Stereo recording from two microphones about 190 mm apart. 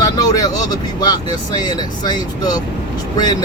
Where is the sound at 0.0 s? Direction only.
20° left (ahead or behind).